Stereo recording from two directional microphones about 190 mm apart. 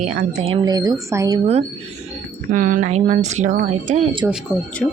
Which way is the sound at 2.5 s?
45° right (ahead or behind).